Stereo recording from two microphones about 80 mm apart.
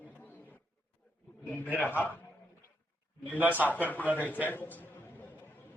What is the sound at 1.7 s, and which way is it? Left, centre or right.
Speech, left.